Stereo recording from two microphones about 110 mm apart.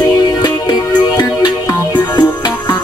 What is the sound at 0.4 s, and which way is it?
Music, 40° left (ahead or behind).